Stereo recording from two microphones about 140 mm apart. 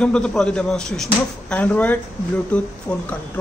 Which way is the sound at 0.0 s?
5° left (ahead or behind).